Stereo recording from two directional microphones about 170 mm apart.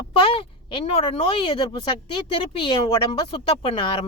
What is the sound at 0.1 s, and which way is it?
Speech, 35° left (ahead or behind).